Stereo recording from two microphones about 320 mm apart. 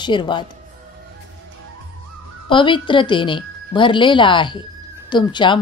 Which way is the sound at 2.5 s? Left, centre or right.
Centre.